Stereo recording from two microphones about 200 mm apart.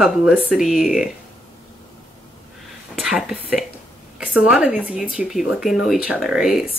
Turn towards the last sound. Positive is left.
turn(degrees=0)  # may be behind; listen again after turning